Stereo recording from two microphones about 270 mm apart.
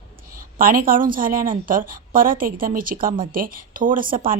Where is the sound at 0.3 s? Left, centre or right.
Right.